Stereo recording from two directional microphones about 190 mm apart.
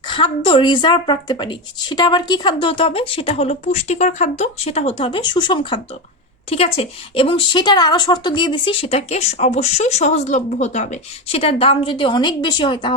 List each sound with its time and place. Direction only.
0.1 s a woman's voice: 25° left (ahead or behind)